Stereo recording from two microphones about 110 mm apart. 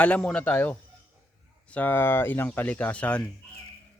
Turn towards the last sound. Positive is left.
turn(degrees=10)  # may be behind; listen again after turning